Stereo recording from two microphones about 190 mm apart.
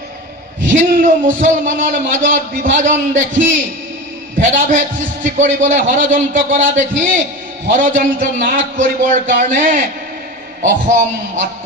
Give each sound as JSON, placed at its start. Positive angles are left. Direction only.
{"t": 0.7, "sound": "a man's voice", "side_deg": -40}